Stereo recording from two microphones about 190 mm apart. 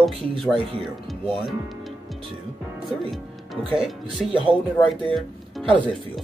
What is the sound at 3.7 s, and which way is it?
Speech, centre (ahead or behind).